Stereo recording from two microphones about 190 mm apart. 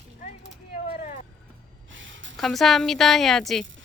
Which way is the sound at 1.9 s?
80° right.